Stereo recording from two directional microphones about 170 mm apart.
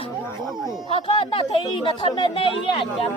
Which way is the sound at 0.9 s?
30° left (ahead or behind).